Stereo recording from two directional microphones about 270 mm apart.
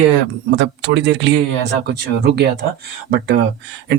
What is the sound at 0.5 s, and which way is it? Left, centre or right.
Speech, right.